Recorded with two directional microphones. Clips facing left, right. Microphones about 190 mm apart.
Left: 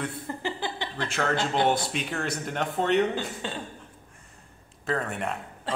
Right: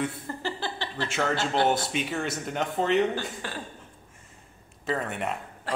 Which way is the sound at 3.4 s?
20° left (ahead or behind).